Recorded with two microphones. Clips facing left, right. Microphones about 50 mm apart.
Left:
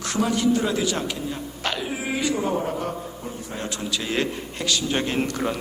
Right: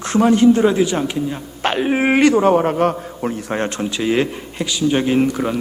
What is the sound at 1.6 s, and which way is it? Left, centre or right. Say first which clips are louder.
A man's voice: right 12 dB; right.